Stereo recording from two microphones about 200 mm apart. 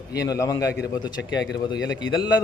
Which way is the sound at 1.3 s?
65° left (ahead or behind).